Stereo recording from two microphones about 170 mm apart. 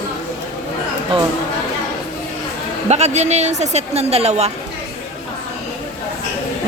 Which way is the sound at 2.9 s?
40° right (ahead or behind).